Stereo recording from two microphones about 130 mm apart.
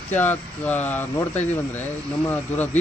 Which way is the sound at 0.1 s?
15° left (ahead or behind).